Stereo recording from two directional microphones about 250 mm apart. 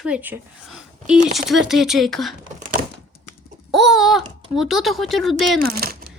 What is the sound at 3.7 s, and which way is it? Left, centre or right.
Speech, centre.